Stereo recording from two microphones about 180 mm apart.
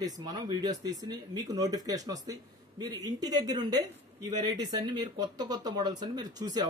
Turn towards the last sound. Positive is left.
turn(degrees=-20)  # may be behind; listen again after turning